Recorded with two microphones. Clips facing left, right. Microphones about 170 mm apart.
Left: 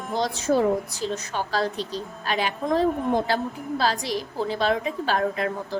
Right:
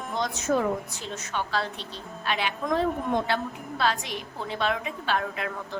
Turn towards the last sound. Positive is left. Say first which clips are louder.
# left 6 dB
turn(degrees=35)  # may be behind; listen again after turning